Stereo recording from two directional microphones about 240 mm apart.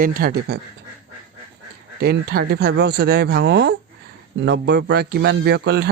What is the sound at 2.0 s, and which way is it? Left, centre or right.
A man's voice, right.